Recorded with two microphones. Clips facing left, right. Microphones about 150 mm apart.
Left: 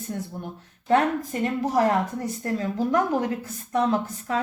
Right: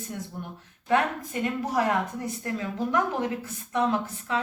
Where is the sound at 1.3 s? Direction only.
40° left (ahead or behind).